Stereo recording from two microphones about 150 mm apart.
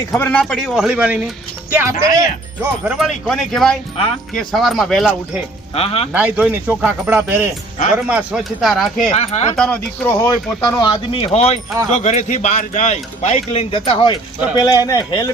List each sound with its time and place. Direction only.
0.1 s speech: 10° left (ahead or behind); by 2.2 s 20° right (ahead or behind)
2.8 s speech: 5° right (ahead or behind)
3.9 s speech: 40° left (ahead or behind)
4.4 s speech: centre (ahead or behind)
5.7 s speech: 40° left (ahead or behind)
6.1 s speech: 10° right (ahead or behind)
9.1 s a man's voice: 45° left (ahead or behind)
9.6 s speech: 10° left (ahead or behind)
10.7 s a man's voice: 25° left (ahead or behind)
14.6 s speech: 25° left (ahead or behind)